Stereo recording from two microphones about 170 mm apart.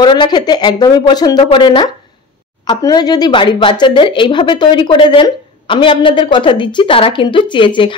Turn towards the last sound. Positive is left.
turn(degrees=30)  # may be behind; listen again after turning